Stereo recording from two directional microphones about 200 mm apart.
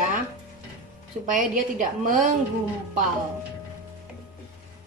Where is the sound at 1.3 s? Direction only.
40° right (ahead or behind).